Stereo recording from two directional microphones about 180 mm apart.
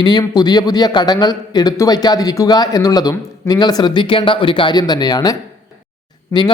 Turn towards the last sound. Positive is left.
turn(degrees=25)  # may be behind; listen again after turning